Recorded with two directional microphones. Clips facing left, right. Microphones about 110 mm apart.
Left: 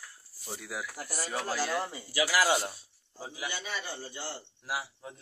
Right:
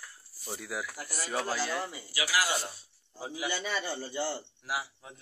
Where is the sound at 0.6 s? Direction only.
5° left (ahead or behind).